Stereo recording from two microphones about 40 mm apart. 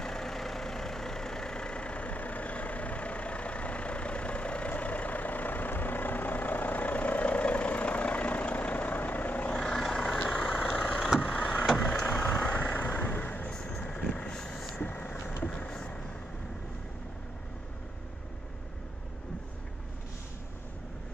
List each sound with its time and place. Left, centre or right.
0.0 s vehicle: centre; by 9.5 s left
9.5 s vehicle: centre
10.1 s vehicle: left
12.2 s vehicle: left
12.7 s vehicle: left
13.2 s vehicle: left
13.5 s vehicle: left
14.8 s vehicle: left
15.5 s vehicle: left